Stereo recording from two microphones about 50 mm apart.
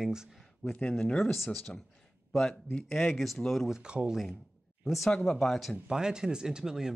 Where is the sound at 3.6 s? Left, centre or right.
Centre.